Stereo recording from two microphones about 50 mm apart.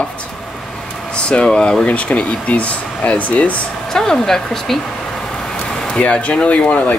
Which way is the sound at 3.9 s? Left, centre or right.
Centre.